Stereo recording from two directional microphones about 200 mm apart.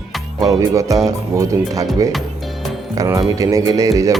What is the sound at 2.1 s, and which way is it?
Music, centre (ahead or behind).